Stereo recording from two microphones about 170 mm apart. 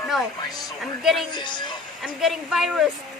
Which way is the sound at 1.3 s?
25° left (ahead or behind).